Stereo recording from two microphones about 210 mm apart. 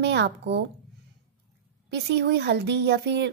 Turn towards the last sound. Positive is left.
turn(degrees=-55)  # may be behind; listen again after turning